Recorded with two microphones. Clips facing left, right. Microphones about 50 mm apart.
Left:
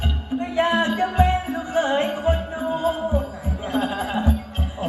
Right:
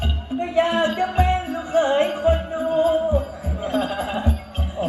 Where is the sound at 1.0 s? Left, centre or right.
Left.